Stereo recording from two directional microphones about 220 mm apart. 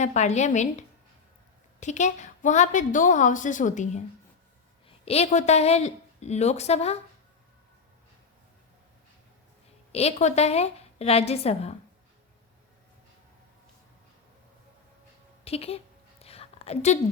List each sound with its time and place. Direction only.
0.0 s a woman's voice: 30° left (ahead or behind)
9.9 s a woman's voice: 30° left (ahead or behind)
15.4 s a woman's voice: 25° left (ahead or behind)
16.2 s a sound: 25° left (ahead or behind)